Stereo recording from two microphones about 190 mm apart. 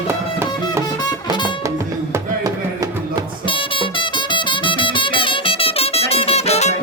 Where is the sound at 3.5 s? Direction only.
25° left (ahead or behind).